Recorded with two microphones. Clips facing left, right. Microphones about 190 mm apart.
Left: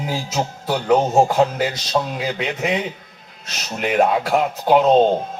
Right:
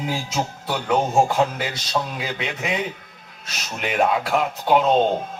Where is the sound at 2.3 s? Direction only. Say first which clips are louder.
Left 5 dB; 40° left (ahead or behind).